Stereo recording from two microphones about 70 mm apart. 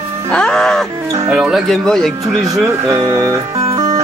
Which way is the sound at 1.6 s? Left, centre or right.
Centre.